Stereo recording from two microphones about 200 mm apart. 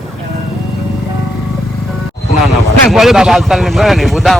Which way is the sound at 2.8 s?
Centre (ahead or behind).